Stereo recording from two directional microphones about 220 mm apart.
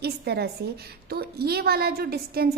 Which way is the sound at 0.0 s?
45° right (ahead or behind).